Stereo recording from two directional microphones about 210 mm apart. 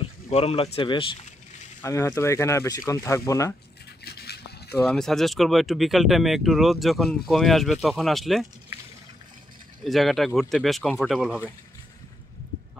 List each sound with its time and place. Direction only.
0.0 s speech: 30° left (ahead or behind)
1.8 s speech: 15° left (ahead or behind)
4.0 s toothbrush: 50° left (ahead or behind)
4.8 s speech: centre (ahead or behind)
9.8 s speech: centre (ahead or behind)